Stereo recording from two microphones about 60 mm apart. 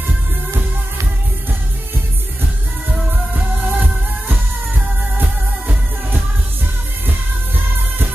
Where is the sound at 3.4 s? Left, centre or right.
Right.